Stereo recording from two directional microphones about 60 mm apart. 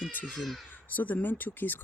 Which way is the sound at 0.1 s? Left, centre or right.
Left.